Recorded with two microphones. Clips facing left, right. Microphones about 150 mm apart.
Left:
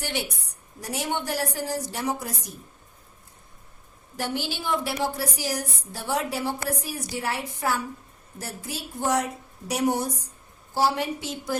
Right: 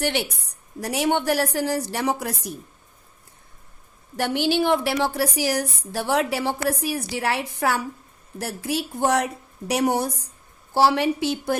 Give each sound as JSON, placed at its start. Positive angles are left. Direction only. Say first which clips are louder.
{"t": 0.0, "sound": "a woman's voice", "louder": "right 6 dB", "side_deg": -70}
{"t": 4.2, "sound": "a woman's voice", "louder": "right 9 dB", "side_deg": -70}